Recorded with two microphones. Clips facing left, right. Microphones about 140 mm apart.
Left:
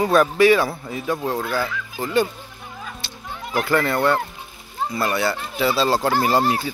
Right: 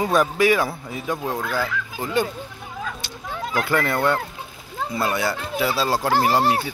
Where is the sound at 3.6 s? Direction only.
15° right (ahead or behind).